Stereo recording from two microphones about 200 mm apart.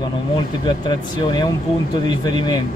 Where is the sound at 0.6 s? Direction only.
25° left (ahead or behind).